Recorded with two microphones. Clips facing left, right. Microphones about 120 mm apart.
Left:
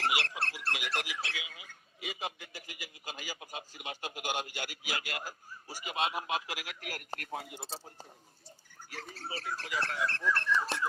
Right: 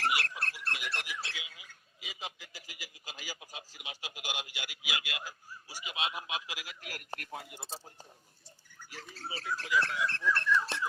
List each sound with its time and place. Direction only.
0.0 s squawk: 25° left (ahead or behind)
0.6 s a sound: 90° left
1.2 s a man's voice: 65° left (ahead or behind)
8.9 s a man's voice: 45° left (ahead or behind)